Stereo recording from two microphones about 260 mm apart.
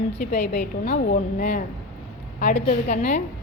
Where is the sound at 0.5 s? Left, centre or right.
Left.